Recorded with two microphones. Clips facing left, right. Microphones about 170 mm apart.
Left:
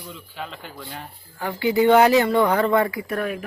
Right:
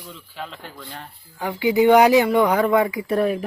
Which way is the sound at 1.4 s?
15° right (ahead or behind).